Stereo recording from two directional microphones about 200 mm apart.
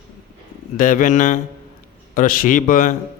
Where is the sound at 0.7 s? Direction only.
40° left (ahead or behind).